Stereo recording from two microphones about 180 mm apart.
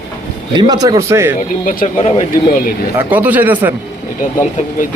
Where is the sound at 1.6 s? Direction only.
50° left (ahead or behind).